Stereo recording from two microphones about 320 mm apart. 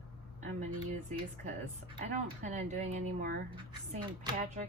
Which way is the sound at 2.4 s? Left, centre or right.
Right.